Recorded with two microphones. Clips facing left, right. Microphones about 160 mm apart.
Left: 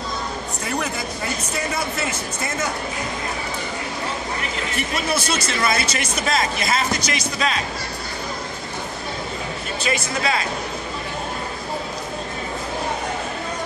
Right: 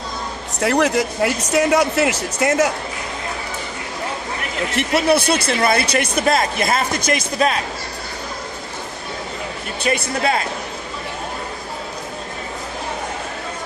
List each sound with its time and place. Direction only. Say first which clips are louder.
0.6 s speech: right 11 dB; 80° right
4.7 s speech: right 9 dB; 70° right (ahead or behind); by 7.5 s 50° right (ahead or behind)
9.8 s speech: right 4 dB; 50° right (ahead or behind)